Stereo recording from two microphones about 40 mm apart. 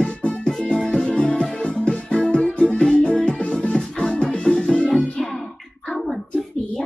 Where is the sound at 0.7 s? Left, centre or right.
Centre.